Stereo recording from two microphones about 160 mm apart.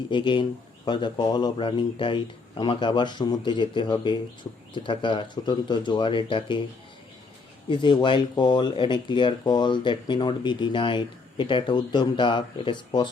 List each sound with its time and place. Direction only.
0.1 s speech: 30° left (ahead or behind)
7.7 s speech: 30° left (ahead or behind)